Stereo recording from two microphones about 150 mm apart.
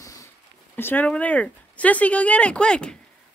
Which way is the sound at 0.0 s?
20° left (ahead or behind).